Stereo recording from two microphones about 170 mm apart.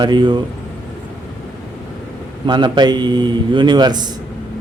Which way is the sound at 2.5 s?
25° right (ahead or behind).